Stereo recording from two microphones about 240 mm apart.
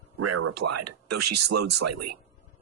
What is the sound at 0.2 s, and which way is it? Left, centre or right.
Speech, right.